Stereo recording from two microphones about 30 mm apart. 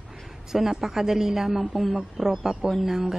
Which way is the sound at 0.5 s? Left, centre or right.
Centre.